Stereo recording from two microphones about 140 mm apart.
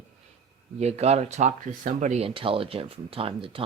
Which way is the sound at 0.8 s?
50° right (ahead or behind).